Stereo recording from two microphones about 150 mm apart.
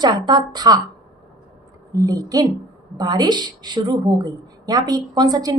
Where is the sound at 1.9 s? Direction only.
25° right (ahead or behind).